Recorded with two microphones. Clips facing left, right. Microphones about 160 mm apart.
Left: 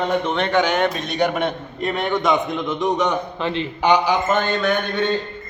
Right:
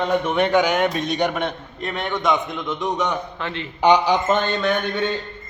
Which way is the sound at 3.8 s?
20° right (ahead or behind).